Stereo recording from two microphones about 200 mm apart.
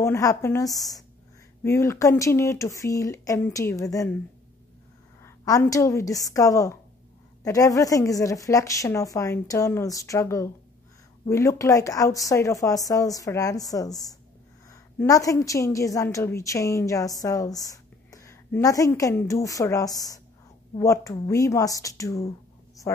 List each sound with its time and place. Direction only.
0.0 s a woman's voice: 15° left (ahead or behind)
5.2 s a woman's voice: 15° left (ahead or behind)